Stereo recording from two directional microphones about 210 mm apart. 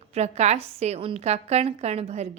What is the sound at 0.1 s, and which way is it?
A woman's voice, 30° right (ahead or behind).